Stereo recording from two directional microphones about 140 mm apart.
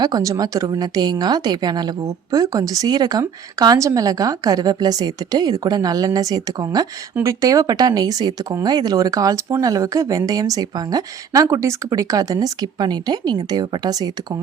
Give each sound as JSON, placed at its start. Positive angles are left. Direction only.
{"t": 0.0, "sound": "a woman's voice", "side_deg": -25}